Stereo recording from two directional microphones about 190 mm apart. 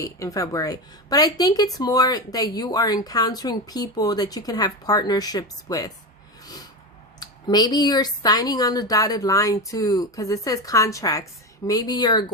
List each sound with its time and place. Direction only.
0.0 s a woman's voice: 15° left (ahead or behind)
7.2 s a woman's voice: 20° left (ahead or behind)